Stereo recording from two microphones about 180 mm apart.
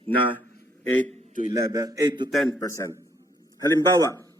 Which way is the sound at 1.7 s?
20° right (ahead or behind).